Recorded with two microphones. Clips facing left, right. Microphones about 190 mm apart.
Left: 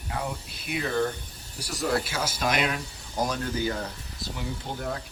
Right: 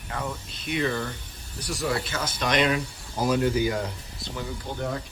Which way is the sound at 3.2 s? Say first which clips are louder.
Right 8 dB; 10° right (ahead or behind).